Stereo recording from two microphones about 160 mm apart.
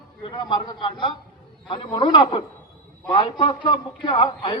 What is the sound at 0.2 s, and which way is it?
A man's voice, 30° left (ahead or behind).